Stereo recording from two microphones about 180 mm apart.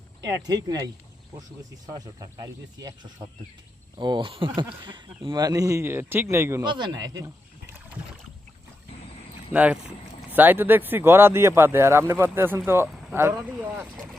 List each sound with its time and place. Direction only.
0.2 s speech: 20° right (ahead or behind)
1.9 s speech: 20° right (ahead or behind)
9.5 s speech: 5° right (ahead or behind)
13.9 s speech: centre (ahead or behind)